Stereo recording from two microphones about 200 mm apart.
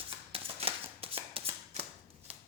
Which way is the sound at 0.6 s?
30° right (ahead or behind).